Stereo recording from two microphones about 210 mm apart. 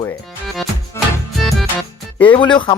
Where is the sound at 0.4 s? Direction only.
Centre (ahead or behind).